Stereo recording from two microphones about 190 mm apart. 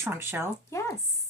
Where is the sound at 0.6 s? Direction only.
15° left (ahead or behind).